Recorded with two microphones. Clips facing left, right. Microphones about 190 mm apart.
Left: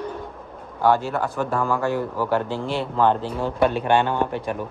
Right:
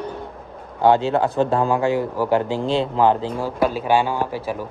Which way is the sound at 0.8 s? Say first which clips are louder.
Right 4 dB; 20° right (ahead or behind).